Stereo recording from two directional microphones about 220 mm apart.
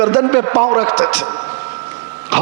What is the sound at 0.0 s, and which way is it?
A man's voice, 15° right (ahead or behind).